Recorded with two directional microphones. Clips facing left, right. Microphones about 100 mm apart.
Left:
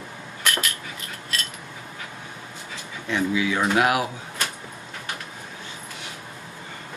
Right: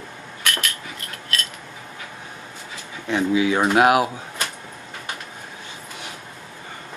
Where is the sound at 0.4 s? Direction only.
Centre (ahead or behind).